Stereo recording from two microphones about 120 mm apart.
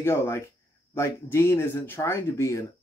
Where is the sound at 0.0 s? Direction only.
20° left (ahead or behind).